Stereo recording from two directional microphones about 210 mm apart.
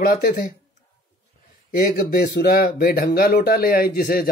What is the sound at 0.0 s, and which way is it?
Speech, 45° left (ahead or behind).